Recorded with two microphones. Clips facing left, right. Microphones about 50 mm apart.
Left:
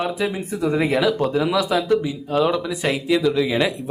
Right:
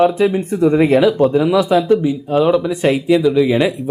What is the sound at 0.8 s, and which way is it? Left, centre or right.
Speech, centre.